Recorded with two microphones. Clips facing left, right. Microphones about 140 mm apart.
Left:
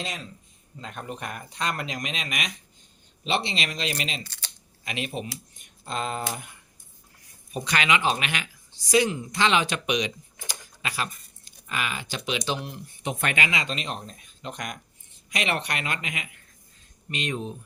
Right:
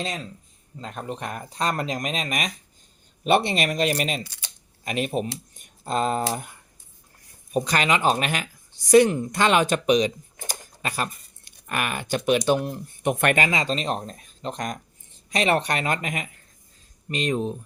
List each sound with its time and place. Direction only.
0.8 s speech: 35° right (ahead or behind)
4.2 s speech: 15° right (ahead or behind)
4.9 s speech: 45° right (ahead or behind)
7.5 s speech: 40° right (ahead or behind)
8.8 s speech: 55° right (ahead or behind)
13.4 s speech: 40° right (ahead or behind)